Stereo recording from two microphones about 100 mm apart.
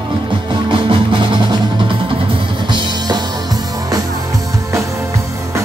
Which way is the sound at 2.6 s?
45° right (ahead or behind).